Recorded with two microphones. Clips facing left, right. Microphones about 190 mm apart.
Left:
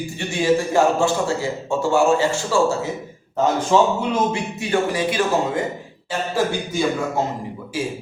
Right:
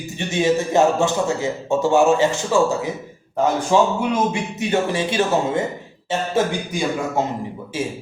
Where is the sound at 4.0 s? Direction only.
20° right (ahead or behind).